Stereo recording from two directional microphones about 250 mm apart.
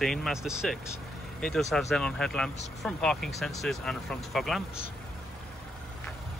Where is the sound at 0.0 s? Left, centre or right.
Centre.